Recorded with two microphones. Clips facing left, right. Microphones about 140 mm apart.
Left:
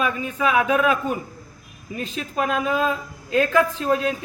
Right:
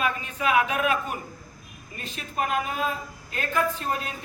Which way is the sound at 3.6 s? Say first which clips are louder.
Left 2 dB; 90° left.